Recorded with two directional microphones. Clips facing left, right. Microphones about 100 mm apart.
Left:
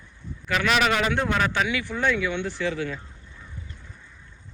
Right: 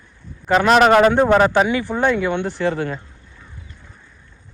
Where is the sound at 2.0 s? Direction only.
50° right (ahead or behind).